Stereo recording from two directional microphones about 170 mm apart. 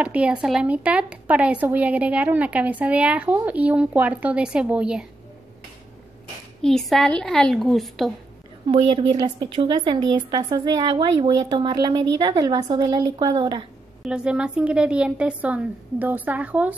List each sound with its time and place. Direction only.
0.0 s speech: 5° right (ahead or behind)
6.6 s a woman's voice: centre (ahead or behind)
8.6 s a woman's voice: 25° right (ahead or behind)
14.0 s speech: 5° right (ahead or behind)